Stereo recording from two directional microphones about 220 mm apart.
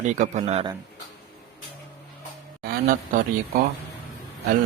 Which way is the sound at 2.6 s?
40° right (ahead or behind).